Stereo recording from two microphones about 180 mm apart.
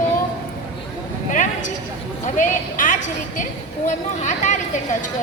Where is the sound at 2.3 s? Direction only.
45° left (ahead or behind).